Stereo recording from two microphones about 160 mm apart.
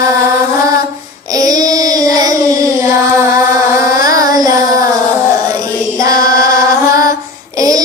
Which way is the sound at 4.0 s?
20° right (ahead or behind).